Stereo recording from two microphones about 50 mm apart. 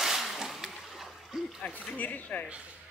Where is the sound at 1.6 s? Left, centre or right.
Left.